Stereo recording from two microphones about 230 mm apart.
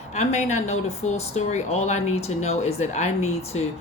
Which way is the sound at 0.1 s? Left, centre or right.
Left.